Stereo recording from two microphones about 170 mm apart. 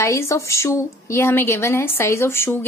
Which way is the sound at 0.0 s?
15° left (ahead or behind).